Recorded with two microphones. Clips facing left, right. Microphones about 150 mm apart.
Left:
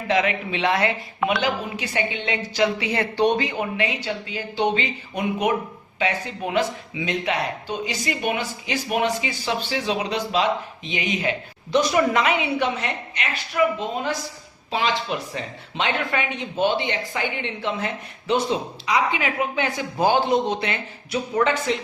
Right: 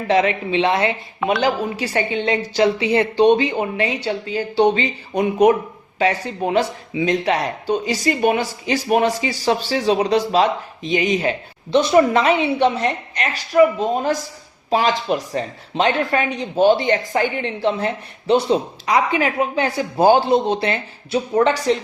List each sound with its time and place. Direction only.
0.1 s a woman's voice: 35° right (ahead or behind)
1.4 s speech: 40° right (ahead or behind)
18.9 s speech: 45° right (ahead or behind)